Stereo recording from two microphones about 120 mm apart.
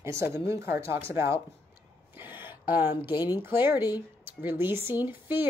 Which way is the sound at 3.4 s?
15° right (ahead or behind).